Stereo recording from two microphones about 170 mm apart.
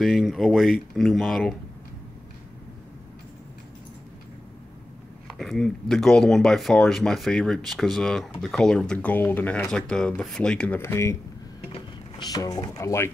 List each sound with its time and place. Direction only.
0.0 s speech: centre (ahead or behind)
5.4 s speech: centre (ahead or behind)
12.2 s speech: 20° left (ahead or behind)